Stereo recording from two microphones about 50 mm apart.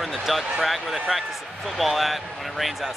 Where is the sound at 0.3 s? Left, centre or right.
Centre.